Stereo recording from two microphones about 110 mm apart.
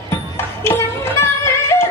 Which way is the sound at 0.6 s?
25° left (ahead or behind).